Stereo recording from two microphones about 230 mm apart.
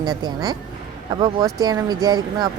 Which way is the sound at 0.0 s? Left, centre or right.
Centre.